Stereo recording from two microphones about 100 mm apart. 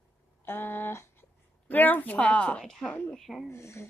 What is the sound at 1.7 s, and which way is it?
A woman's voice, 20° left (ahead or behind).